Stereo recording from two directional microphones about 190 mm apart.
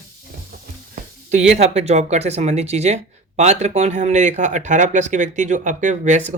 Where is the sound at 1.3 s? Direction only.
35° right (ahead or behind).